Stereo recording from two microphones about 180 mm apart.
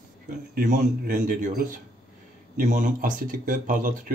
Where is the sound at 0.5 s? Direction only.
50° right (ahead or behind).